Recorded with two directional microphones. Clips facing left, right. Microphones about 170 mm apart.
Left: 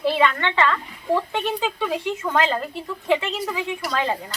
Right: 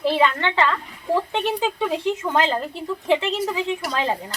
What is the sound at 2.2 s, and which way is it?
Speech, 25° right (ahead or behind).